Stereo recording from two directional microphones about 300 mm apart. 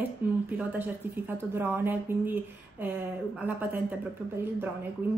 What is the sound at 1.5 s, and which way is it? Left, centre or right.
Speech, centre.